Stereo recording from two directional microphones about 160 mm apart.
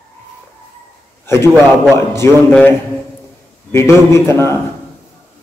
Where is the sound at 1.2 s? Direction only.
15° left (ahead or behind).